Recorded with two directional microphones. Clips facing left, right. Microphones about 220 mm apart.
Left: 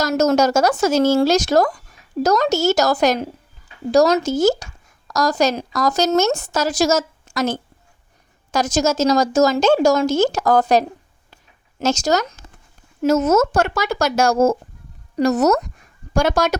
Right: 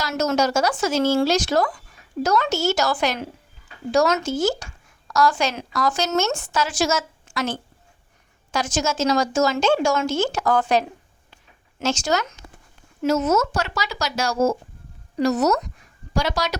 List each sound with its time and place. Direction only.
0.0 s speech: 40° left (ahead or behind)